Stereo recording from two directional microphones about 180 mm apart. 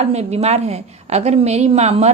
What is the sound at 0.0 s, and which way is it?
Speech, 35° right (ahead or behind).